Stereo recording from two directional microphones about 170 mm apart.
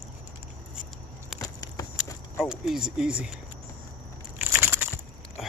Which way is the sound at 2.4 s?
5° right (ahead or behind).